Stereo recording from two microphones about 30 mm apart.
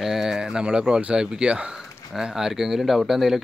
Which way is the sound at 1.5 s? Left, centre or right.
Right.